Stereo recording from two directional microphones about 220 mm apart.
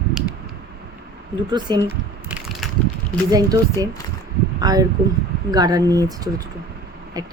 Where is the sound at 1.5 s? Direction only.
20° right (ahead or behind).